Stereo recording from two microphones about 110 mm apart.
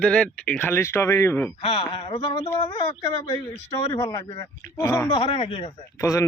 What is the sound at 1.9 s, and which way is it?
Speech, 65° left (ahead or behind).